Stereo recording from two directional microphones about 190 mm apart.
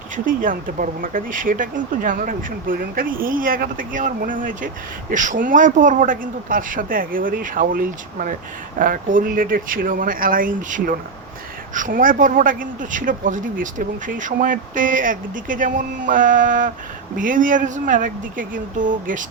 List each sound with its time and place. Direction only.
0.3 s speech: 45° right (ahead or behind)